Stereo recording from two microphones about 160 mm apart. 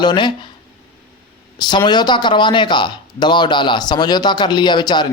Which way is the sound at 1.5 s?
25° left (ahead or behind).